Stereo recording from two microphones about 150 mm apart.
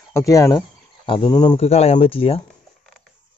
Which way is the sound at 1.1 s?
35° left (ahead or behind).